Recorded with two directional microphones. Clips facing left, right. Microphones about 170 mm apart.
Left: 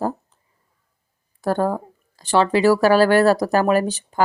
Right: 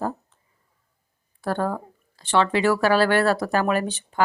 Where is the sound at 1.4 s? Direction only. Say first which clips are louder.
Left 5 dB; 40° left (ahead or behind).